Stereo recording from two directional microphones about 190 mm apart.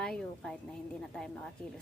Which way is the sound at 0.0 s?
5° left (ahead or behind).